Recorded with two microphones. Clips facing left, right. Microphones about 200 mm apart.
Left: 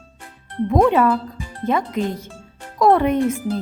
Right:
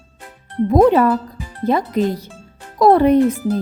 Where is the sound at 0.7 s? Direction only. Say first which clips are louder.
Right 3 dB; 35° right (ahead or behind).